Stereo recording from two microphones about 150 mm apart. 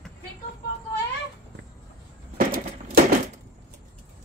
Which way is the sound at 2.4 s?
75° right (ahead or behind).